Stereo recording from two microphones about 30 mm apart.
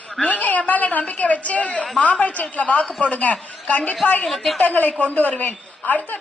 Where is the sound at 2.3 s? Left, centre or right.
Left.